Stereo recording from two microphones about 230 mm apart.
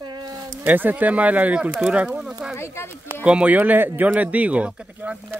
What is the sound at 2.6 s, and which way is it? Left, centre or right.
Speech, centre.